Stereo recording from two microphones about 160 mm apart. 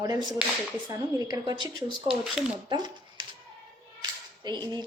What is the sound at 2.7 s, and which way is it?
A woman's voice, 25° right (ahead or behind).